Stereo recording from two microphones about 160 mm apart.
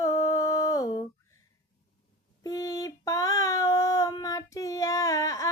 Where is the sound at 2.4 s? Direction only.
25° left (ahead or behind).